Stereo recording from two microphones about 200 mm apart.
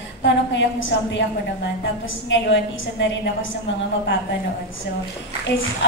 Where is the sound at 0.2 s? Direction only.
60° left (ahead or behind).